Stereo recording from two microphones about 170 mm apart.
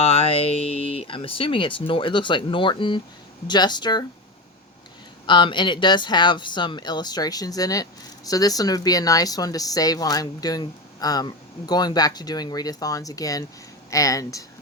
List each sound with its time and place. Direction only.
0.0 s speech: 35° left (ahead or behind)
5.2 s speech: 25° left (ahead or behind)